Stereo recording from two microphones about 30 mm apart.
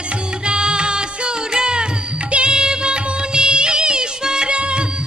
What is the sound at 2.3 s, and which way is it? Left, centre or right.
Music of bollywood, right.